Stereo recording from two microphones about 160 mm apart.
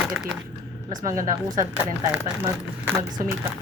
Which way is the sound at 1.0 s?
20° right (ahead or behind).